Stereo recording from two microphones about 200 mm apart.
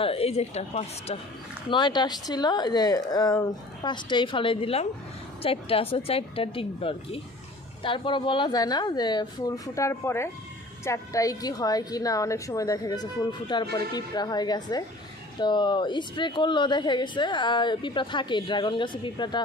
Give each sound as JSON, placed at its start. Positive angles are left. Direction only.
{"t": 0.0, "sound": "a woman's voice", "side_deg": 30}
{"t": 1.7, "sound": "a woman's voice", "side_deg": 20}